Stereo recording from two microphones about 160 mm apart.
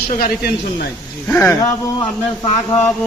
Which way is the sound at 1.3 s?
20° left (ahead or behind).